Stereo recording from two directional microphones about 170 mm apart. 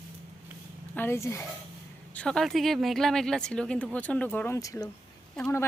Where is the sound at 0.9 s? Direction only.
15° left (ahead or behind).